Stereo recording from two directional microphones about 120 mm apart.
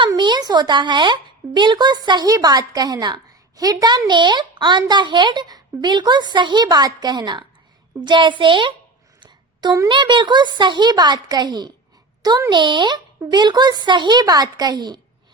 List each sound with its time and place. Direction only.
0.2 s a woman's voice: 40° right (ahead or behind)
9.2 s a sound: 40° right (ahead or behind)
9.9 s a woman's voice: 40° right (ahead or behind)